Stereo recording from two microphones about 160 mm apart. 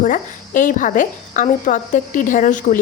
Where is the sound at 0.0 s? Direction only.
55° left (ahead or behind).